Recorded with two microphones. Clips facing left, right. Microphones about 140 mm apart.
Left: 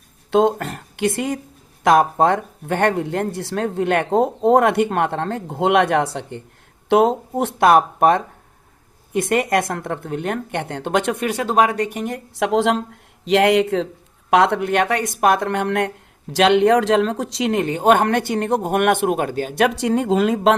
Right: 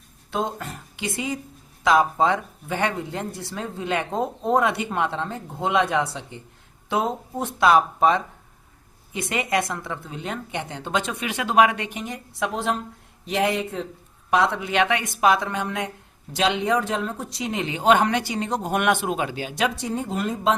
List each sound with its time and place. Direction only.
0.3 s speech: 75° left (ahead or behind)
6.8 s speech: 70° left (ahead or behind)
11.3 s speech: 40° left (ahead or behind)
11.9 s speech: 55° left (ahead or behind)
12.5 s a woman's voice: 90° left
13.2 s speech: 80° left
14.3 s speech: 70° left (ahead or behind)
17.6 s speech: 50° left (ahead or behind); by 20.6 s 85° left